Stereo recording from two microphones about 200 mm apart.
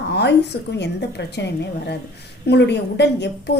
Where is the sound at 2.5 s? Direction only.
60° left (ahead or behind).